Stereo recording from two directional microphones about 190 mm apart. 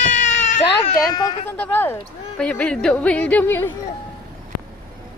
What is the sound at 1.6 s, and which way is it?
Speech, 10° left (ahead or behind).